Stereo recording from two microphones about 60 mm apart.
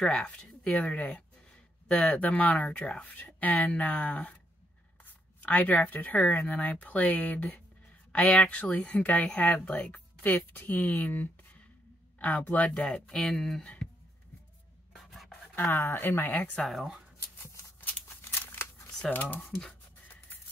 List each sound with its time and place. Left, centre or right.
0.0 s speech: centre
12.4 s speech: left
14.9 s filing: centre
15.7 s speech: left
16.6 s speech: centre
17.4 s a sound: left
18.5 s camera: left
19.0 s speech: left